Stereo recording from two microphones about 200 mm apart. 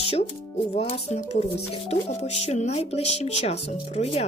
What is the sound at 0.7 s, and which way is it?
Speech, 30° left (ahead or behind).